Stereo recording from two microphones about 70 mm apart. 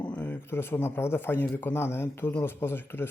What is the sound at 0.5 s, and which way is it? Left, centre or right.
Speech, left.